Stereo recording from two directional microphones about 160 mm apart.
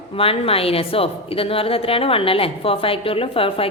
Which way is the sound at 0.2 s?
35° left (ahead or behind).